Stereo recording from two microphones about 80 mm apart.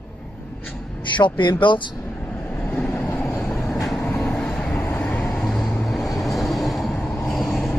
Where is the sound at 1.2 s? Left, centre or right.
Left.